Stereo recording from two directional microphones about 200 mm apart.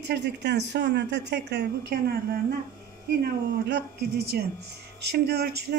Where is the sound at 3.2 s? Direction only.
55° right (ahead or behind).